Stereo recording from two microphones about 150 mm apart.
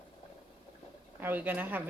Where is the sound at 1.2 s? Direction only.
10° right (ahead or behind).